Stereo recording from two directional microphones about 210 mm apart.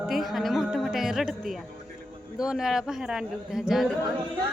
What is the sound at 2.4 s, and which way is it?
Speech, centre (ahead or behind).